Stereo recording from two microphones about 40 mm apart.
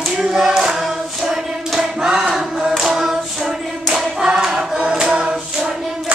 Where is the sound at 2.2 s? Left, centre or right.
Centre.